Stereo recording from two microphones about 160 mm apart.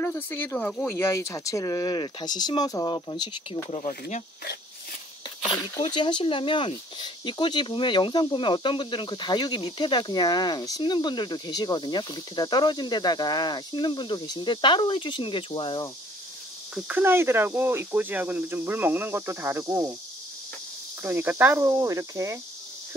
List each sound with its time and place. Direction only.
0.0 s speech: 15° left (ahead or behind)
5.4 s speech: 25° left (ahead or behind)
16.7 s speech: 10° right (ahead or behind)
21.0 s speech: 15° right (ahead or behind)